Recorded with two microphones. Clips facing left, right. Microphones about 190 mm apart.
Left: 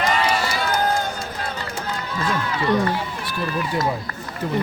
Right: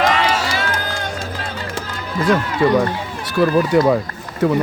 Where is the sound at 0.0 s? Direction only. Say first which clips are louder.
Right 3 dB; 90° right.